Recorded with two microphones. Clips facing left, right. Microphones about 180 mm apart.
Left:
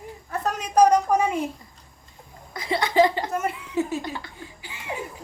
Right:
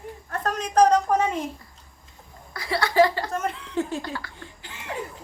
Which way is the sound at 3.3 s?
10° left (ahead or behind).